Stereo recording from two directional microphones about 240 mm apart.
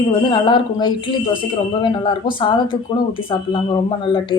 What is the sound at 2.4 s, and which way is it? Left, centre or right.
Speech, left.